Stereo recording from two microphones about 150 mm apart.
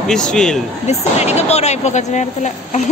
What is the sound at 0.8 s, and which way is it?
A woman's voice, 45° left (ahead or behind).